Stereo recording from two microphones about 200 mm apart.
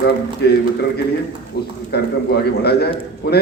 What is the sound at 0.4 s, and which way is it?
A man's voice, 55° left (ahead or behind).